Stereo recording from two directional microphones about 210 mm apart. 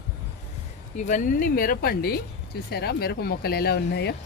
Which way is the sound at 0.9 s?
35° left (ahead or behind).